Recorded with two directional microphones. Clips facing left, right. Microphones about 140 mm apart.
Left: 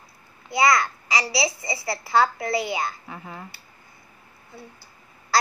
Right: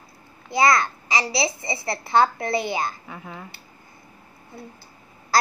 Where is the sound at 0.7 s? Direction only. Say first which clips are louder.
Even; 25° right (ahead or behind).